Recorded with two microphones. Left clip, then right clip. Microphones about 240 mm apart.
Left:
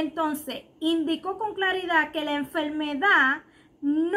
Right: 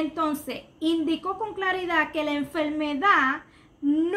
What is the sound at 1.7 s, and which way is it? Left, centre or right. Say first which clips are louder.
Speech: even; right.